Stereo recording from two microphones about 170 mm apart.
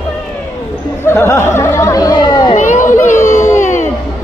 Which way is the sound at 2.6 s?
50° left (ahead or behind).